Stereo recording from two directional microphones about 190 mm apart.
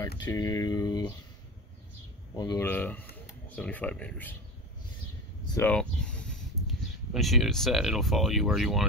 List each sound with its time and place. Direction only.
0.2 s speech: 20° left (ahead or behind)
2.3 s speech: 20° left (ahead or behind)
2.7 s speech: 10° left (ahead or behind)
5.4 s speech: 20° left (ahead or behind)
5.7 s speech: 5° left (ahead or behind)